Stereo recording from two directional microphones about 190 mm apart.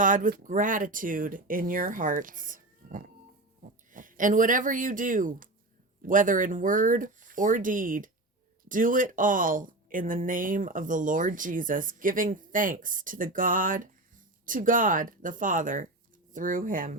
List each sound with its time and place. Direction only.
0.0 s speech: 45° right (ahead or behind)